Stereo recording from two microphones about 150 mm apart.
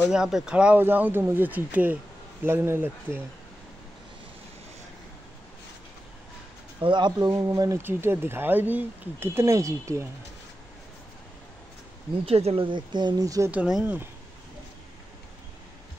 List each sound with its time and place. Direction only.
0.0 s speech: 5° right (ahead or behind)
6.8 s speech: 30° right (ahead or behind)
12.3 s speech: 40° right (ahead or behind); by 13.5 s 25° right (ahead or behind)
13.5 s speech: 5° right (ahead or behind)